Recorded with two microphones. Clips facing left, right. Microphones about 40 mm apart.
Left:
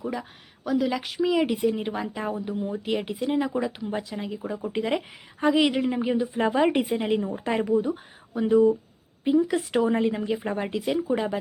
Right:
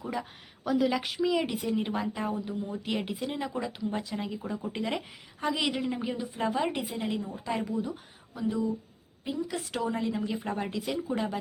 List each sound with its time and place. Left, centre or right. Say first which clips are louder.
0.0 s speech: left 3 dB; centre
1.2 s a woman's voice: left 7 dB; centre
2.9 s a woman's voice: left 7 dB; centre
3.9 s a woman's voice: left 3 dB; centre
6.3 s speech: left 7 dB; left
8.4 s speech: left 11 dB; left
9.2 s speech: left 11 dB; left